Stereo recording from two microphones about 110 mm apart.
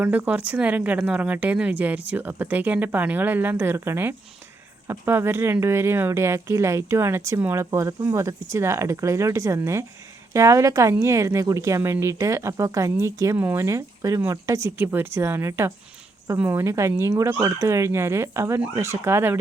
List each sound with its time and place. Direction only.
0.0 s a woman's voice: 15° right (ahead or behind)
13.3 s speech: 15° right (ahead or behind)